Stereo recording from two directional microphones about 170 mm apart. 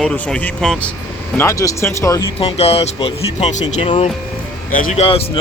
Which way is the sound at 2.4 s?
35° left (ahead or behind).